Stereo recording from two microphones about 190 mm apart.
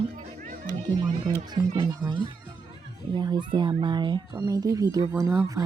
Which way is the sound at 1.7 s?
25° right (ahead or behind).